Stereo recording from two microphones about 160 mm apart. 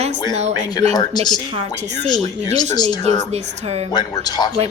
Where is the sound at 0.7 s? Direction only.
25° left (ahead or behind).